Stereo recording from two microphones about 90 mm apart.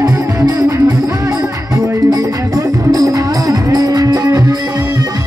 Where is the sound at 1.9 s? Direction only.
40° right (ahead or behind).